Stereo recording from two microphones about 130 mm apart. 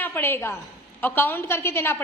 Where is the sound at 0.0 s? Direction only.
15° left (ahead or behind).